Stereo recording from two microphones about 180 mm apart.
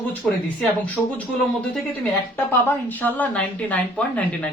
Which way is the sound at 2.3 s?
10° left (ahead or behind).